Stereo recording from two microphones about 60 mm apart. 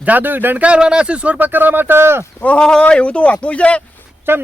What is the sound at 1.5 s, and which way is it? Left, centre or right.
Speech, right.